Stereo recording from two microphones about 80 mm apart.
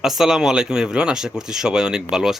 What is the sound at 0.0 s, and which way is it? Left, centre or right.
Speech, centre.